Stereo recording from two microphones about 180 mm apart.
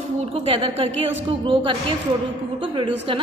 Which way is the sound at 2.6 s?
25° right (ahead or behind).